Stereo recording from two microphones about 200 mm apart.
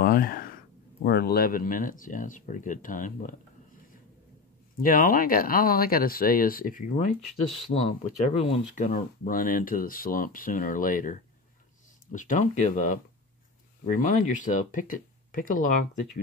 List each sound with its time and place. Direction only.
0.0 s a sound: 45° left (ahead or behind)
1.0 s speech: 50° left (ahead or behind)
4.7 s speech: 45° left (ahead or behind)
8.3 s speech: 35° left (ahead or behind)